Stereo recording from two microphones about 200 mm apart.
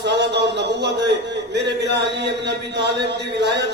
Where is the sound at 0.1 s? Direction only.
60° right (ahead or behind).